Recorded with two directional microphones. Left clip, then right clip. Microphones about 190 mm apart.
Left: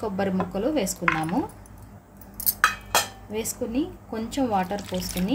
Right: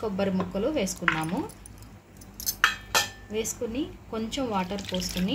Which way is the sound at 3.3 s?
45° left (ahead or behind).